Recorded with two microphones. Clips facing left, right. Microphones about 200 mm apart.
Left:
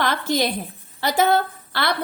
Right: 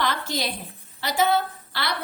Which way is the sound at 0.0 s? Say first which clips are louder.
Left 5 dB; 50° left (ahead or behind).